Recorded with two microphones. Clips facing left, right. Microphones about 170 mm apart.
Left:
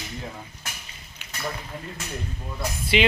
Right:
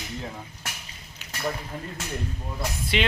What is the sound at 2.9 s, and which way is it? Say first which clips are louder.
Speech: left 5 dB; 5° left (ahead or behind).